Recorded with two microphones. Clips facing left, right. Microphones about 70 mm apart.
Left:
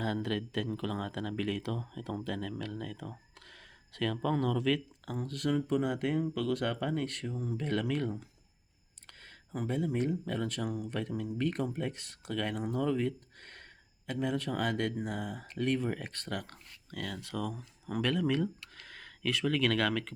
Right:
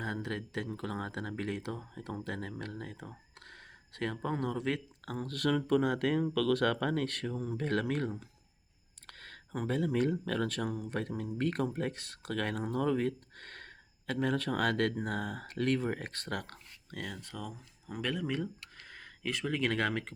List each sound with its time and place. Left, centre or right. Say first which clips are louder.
0.0 s speech: left 4 dB; right
5.2 s speech: right 1 dB; right
9.0 s a sound: right 4 dB; right
9.5 s speech: right 1 dB; right
15.9 s speech: even; right
16.9 s speech: left 2 dB; right
18.0 s speech: left 4 dB; centre; by 20.1 s right